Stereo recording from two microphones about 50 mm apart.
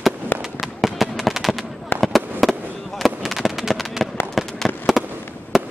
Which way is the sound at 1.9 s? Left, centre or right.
Left.